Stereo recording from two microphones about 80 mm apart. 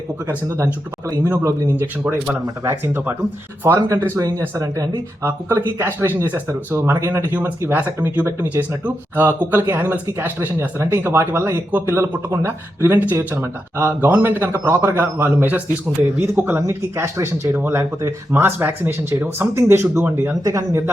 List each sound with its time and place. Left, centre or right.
1.2 s speech: right
3.6 s speech: right
5.2 s speech: right
20.4 s speech: right